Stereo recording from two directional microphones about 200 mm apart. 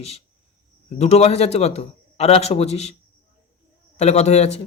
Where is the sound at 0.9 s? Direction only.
30° left (ahead or behind).